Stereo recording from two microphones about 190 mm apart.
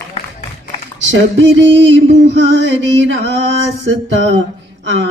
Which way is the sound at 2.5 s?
70° right (ahead or behind).